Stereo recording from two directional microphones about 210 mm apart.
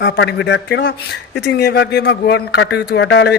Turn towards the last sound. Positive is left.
turn(degrees=55)  # may be behind; listen again after turning